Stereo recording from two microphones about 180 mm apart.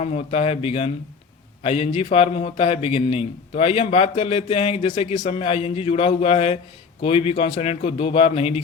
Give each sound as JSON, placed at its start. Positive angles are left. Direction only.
{"t": 0.0, "sound": "a man's voice", "side_deg": 35}